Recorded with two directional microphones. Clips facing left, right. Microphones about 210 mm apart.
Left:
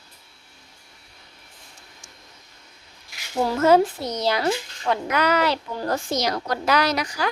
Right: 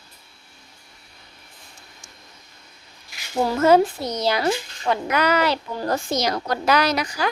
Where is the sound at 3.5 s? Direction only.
10° right (ahead or behind).